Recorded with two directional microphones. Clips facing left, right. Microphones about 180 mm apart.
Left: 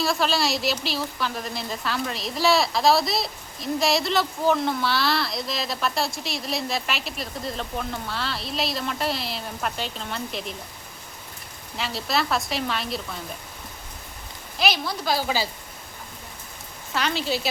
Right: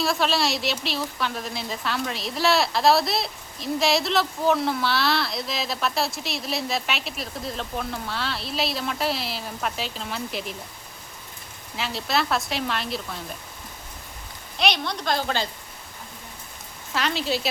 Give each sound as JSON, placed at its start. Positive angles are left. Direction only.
{"t": 0.0, "sound": "a woman's voice", "side_deg": 0}
{"t": 11.8, "sound": "a woman's voice", "side_deg": 0}
{"t": 14.6, "sound": "a woman's voice", "side_deg": 5}
{"t": 16.9, "sound": "a woman's voice", "side_deg": 0}